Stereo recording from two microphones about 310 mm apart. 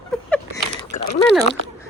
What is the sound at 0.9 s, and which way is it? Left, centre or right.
Speech, left.